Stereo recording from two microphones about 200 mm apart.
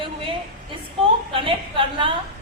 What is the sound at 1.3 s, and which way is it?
Speech, 25° right (ahead or behind).